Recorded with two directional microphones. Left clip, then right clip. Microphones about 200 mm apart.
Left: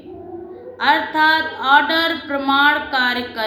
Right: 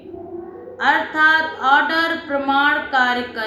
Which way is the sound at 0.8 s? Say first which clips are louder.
Left 1 dB; 10° left (ahead or behind).